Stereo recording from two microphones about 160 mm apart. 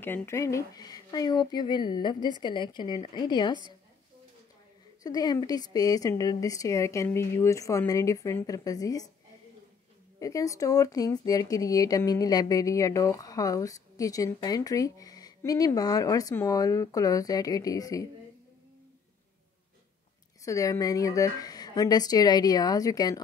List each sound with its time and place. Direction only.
0.0 s speech: 15° left (ahead or behind)
5.0 s speech: 25° left (ahead or behind)
10.1 s speech: 20° left (ahead or behind)
20.4 s speech: 20° left (ahead or behind)